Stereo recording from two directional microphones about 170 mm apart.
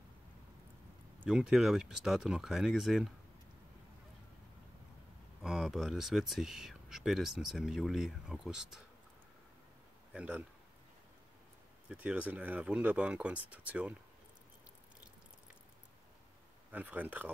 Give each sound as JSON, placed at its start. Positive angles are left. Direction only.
{"t": 1.2, "sound": "speech", "side_deg": -5}
{"t": 5.4, "sound": "speech", "side_deg": 0}
{"t": 10.1, "sound": "speech", "side_deg": -5}
{"t": 11.9, "sound": "speech", "side_deg": -5}
{"t": 16.7, "sound": "speech", "side_deg": -10}